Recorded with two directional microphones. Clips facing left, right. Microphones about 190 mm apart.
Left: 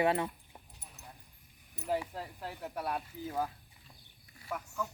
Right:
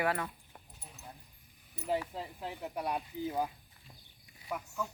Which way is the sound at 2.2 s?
5° left (ahead or behind).